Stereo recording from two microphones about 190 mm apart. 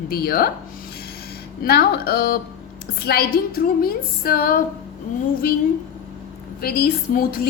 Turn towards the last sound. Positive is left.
turn(degrees=50)  # may be behind; listen again after turning